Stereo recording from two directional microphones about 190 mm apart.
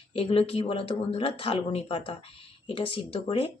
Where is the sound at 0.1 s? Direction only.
30° left (ahead or behind).